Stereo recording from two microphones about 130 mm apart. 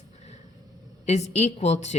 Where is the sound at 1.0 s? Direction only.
55° left (ahead or behind).